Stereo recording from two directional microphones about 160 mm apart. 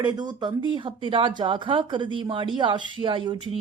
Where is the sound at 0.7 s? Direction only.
30° right (ahead or behind).